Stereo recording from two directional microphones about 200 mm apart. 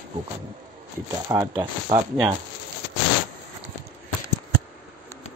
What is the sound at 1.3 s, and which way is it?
Speech, 15° right (ahead or behind).